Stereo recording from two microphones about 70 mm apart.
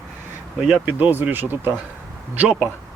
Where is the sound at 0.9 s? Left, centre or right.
Right.